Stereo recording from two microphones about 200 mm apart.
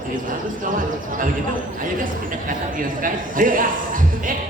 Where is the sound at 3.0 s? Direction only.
45° right (ahead or behind).